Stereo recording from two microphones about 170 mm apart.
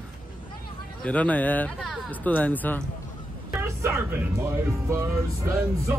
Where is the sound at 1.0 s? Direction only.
10° left (ahead or behind).